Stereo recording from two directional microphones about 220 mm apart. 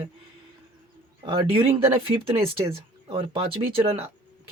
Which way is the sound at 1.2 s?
25° right (ahead or behind).